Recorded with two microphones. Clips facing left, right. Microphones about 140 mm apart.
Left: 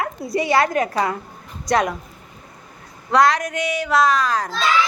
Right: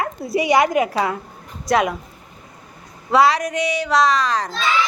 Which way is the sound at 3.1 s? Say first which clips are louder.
Right 1 dB; 5° right (ahead or behind).